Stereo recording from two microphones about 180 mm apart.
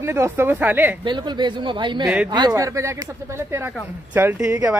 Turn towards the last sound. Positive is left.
turn(degrees=-10)  # may be behind; listen again after turning